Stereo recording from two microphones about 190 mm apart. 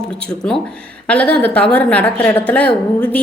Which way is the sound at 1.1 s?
5° left (ahead or behind).